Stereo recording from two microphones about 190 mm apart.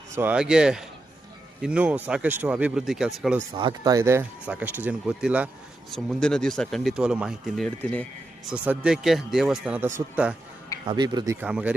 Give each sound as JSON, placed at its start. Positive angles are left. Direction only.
{"t": 0.2, "sound": "speech", "side_deg": -5}
{"t": 3.5, "sound": "speech", "side_deg": -25}
{"t": 10.8, "sound": "speech", "side_deg": -20}
{"t": 11.3, "sound": "speech", "side_deg": -5}